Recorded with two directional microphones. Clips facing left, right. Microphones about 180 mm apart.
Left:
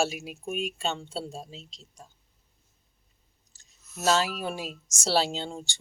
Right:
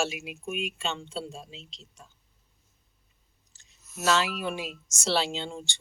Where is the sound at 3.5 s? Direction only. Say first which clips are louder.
Right 1 dB; 40° left (ahead or behind).